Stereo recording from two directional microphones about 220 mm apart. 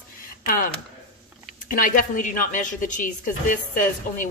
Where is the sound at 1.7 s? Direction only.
35° left (ahead or behind).